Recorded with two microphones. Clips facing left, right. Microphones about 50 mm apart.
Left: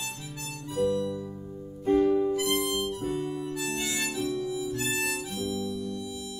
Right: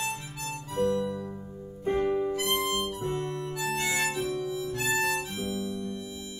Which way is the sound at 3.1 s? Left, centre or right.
Right.